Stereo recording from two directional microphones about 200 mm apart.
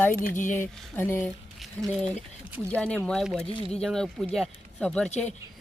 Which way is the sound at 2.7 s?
5° left (ahead or behind).